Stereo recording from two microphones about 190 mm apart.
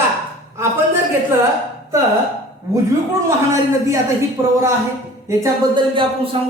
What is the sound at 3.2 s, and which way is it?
A man's voice, 15° right (ahead or behind).